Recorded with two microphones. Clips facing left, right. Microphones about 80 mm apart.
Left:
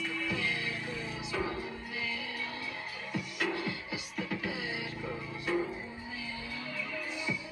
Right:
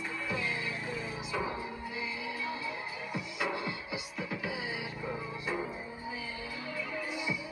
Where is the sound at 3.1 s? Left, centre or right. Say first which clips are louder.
Left 1 dB; right.